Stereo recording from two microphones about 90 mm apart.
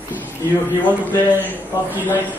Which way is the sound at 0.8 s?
20° left (ahead or behind).